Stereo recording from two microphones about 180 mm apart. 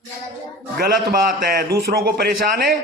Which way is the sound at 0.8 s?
55° right (ahead or behind).